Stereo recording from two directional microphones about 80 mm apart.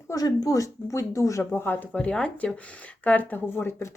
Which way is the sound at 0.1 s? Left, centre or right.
Left.